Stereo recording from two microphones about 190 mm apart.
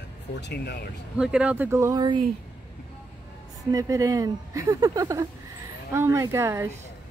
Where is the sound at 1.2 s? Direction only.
5° right (ahead or behind); by 2.2 s 20° right (ahead or behind).